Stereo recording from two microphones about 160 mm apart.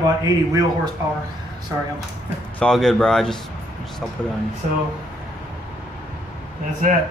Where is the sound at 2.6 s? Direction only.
5° left (ahead or behind).